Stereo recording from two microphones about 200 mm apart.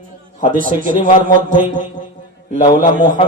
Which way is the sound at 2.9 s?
40° right (ahead or behind).